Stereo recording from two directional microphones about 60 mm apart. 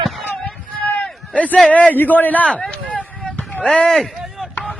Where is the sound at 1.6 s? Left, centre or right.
Left.